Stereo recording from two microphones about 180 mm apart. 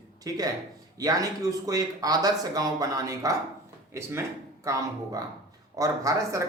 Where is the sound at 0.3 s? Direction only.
20° right (ahead or behind).